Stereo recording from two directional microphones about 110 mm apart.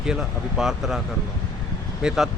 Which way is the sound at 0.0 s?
5° right (ahead or behind).